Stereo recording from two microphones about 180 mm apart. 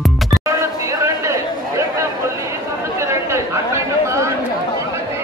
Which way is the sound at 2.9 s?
15° right (ahead or behind).